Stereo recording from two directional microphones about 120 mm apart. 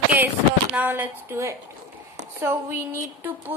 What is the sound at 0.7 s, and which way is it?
A woman's voice, 15° right (ahead or behind).